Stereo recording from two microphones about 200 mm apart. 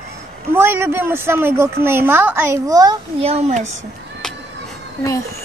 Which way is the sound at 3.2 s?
30° right (ahead or behind).